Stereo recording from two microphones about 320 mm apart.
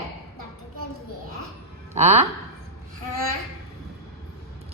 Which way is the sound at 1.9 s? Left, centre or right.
Right.